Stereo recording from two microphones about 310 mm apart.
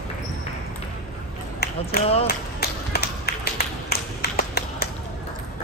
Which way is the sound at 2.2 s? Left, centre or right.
Left.